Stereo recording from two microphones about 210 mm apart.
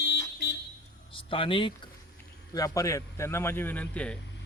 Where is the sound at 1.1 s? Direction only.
25° left (ahead or behind).